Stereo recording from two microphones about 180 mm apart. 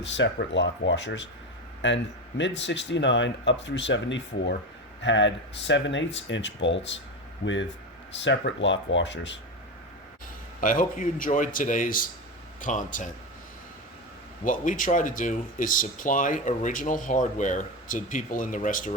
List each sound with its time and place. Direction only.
0.0 s speech: 80° left
10.6 s speech: 45° left (ahead or behind)
14.4 s speech: 45° left (ahead or behind)